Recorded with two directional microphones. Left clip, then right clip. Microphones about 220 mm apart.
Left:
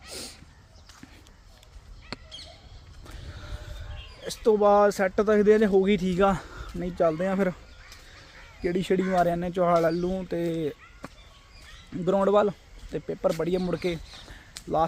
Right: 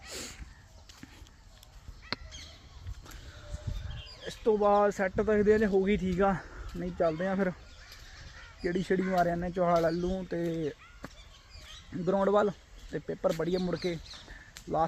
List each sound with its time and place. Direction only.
2.1 s a sound: centre (ahead or behind)
4.2 s a man's voice: 15° left (ahead or behind)
8.6 s speech: 15° left (ahead or behind)